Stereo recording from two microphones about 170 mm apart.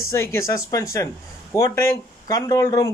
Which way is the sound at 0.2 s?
15° left (ahead or behind).